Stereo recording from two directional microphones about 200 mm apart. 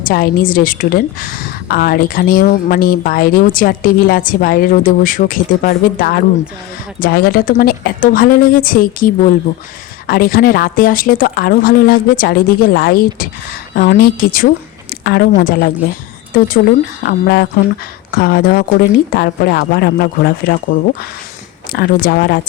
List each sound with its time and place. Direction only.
0.0 s a woman's voice: 45° left (ahead or behind)
21.7 s a woman's voice: 50° left (ahead or behind)